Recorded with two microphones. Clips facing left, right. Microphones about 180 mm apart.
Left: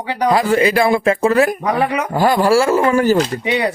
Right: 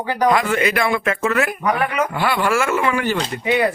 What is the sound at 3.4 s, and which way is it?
Speech, 20° left (ahead or behind).